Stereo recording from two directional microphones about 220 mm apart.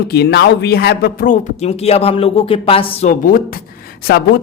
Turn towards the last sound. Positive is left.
turn(degrees=45)  # may be behind; listen again after turning